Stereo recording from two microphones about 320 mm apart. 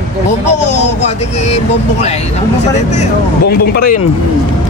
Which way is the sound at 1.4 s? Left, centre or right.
Centre.